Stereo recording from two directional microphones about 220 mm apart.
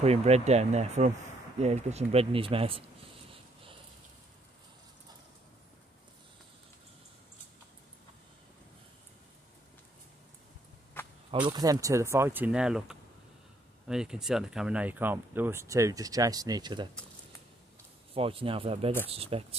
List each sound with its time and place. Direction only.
0.0 s speech: 30° right (ahead or behind)
11.2 s speech: 20° right (ahead or behind)
18.1 s speech: 25° right (ahead or behind)